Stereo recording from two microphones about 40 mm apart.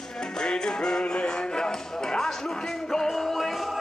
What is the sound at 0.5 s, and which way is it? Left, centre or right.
Music, centre.